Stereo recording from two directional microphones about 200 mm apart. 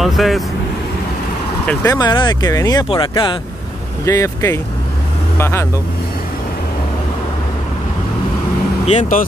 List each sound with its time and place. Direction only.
0.0 s speech: centre (ahead or behind)
1.7 s speech: 10° left (ahead or behind)
2.0 s speech: 20° left (ahead or behind)
8.8 s speech: 35° left (ahead or behind)